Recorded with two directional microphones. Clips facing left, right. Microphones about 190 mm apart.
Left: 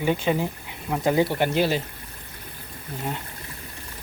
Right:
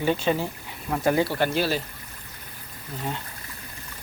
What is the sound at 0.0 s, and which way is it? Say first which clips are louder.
Speech: left 1 dB; 15° left (ahead or behind).